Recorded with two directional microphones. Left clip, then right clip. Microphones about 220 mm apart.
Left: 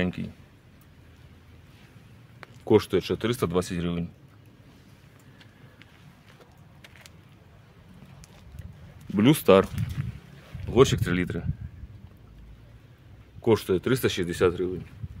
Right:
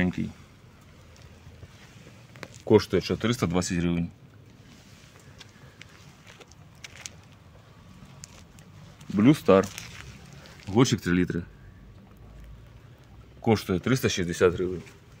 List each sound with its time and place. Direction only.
0.0 s speech: 5° left (ahead or behind)
2.6 s speech: centre (ahead or behind)
9.1 s speech: 15° left (ahead or behind)
10.7 s speech: 15° left (ahead or behind)
13.4 s speech: centre (ahead or behind)